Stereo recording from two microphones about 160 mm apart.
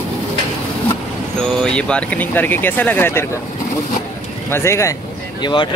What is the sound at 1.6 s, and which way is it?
Speech, 5° left (ahead or behind).